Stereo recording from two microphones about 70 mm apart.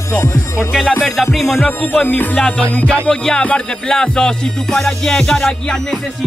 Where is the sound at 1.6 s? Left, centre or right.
Left.